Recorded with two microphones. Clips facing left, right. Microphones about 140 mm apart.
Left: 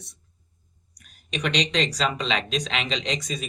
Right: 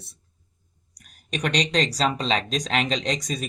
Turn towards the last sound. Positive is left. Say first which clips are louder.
# right 2 dB
turn(degrees=-40)  # may be behind; listen again after turning